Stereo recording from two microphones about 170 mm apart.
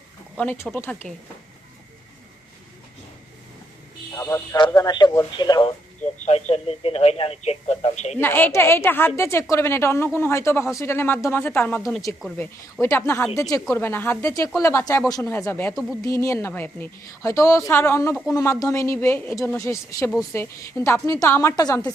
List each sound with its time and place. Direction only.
0.3 s a woman's voice: 15° left (ahead or behind)
4.1 s speech: 20° left (ahead or behind)
6.2 s speech: 40° left (ahead or behind)
8.2 s a woman's voice: 10° left (ahead or behind)
12.8 s a woman's voice: 15° left (ahead or behind)
15.7 s a woman's voice: 5° right (ahead or behind)
16.0 s a woman's voice: 20° left (ahead or behind)